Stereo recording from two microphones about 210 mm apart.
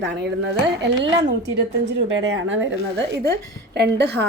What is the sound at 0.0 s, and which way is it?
A woman's voice, 55° right (ahead or behind).